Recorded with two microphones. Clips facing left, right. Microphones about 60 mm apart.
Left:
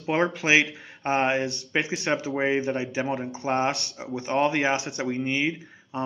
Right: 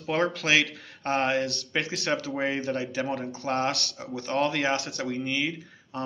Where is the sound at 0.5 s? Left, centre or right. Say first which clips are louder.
Left 3 dB; centre.